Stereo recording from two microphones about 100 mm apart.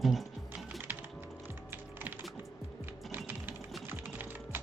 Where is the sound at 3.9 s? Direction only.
20° right (ahead or behind).